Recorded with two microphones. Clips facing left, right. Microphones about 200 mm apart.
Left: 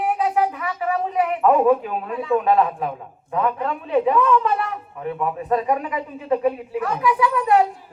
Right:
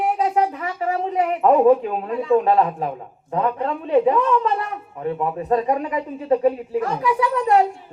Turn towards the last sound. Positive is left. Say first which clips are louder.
# even
turn(degrees=-30)  # may be behind; listen again after turning